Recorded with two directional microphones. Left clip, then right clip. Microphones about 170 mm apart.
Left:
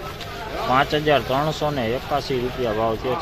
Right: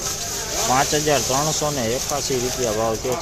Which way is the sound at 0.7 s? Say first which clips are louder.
Left 1 dB; 10° right (ahead or behind).